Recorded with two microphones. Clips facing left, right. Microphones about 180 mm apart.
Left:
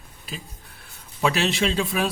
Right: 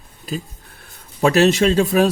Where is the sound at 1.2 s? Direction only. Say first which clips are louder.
Right 8 dB; 45° right (ahead or behind).